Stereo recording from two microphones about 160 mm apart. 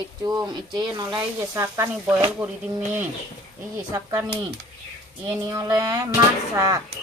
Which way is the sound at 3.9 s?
20° right (ahead or behind).